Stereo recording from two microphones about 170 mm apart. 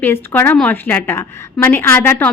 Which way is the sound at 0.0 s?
15° left (ahead or behind).